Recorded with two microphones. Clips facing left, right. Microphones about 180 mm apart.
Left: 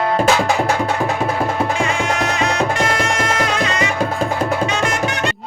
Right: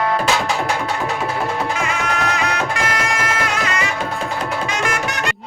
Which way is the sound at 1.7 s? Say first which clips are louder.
Left 3 dB; 30° left (ahead or behind).